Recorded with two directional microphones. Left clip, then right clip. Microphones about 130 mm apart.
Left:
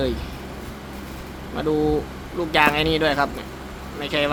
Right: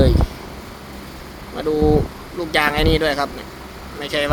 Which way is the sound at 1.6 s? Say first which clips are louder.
Right 4 dB; 30° right (ahead or behind).